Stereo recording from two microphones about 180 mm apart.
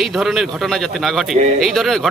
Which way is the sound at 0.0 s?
Centre (ahead or behind).